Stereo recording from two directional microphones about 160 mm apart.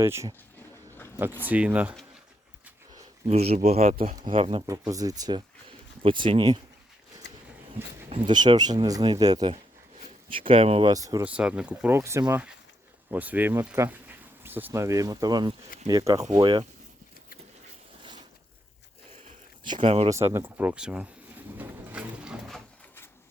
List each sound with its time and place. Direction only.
0.0 s speech: 15° right (ahead or behind)
0.9 s a sound: 15° left (ahead or behind)
1.2 s speech: 10° right (ahead or behind)
3.5 s speech: 40° right (ahead or behind)
4.1 s speech: 30° right (ahead or behind)
4.4 s speech: 40° right (ahead or behind)
4.9 s speech: 20° right (ahead or behind)
7.2 s a sound: 90° left
8.1 s speech: 30° right (ahead or behind)
10.9 s speech: 20° right (ahead or behind)
11.3 s speech: 5° right (ahead or behind); by 16.6 s 30° right (ahead or behind)
19.6 s speech: 30° right (ahead or behind)
20.1 s a sound: 15° right (ahead or behind)